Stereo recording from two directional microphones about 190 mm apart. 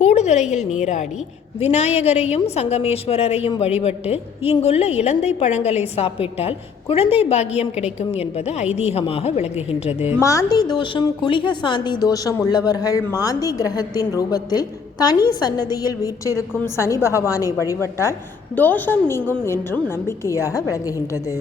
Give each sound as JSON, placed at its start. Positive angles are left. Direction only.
{"t": 0.0, "sound": "a sound", "side_deg": 35}
{"t": 0.8, "sound": "a woman's voice", "side_deg": 40}
{"t": 10.2, "sound": "a woman's voice", "side_deg": 15}
{"t": 18.5, "sound": "a woman's voice", "side_deg": 10}